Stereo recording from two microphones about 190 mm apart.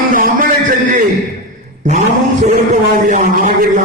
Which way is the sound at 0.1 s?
45° right (ahead or behind).